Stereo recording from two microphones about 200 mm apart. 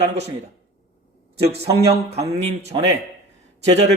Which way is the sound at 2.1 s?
30° right (ahead or behind).